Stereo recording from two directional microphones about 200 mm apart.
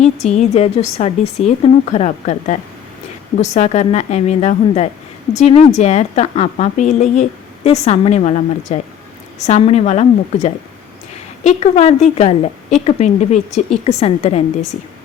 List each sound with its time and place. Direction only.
0.0 s a woman's voice: 35° left (ahead or behind)